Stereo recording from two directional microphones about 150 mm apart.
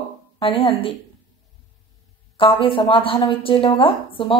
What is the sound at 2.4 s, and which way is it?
A woman's voice, 35° left (ahead or behind).